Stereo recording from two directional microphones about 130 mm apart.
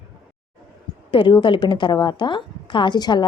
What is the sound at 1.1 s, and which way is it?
A woman's voice, 40° left (ahead or behind).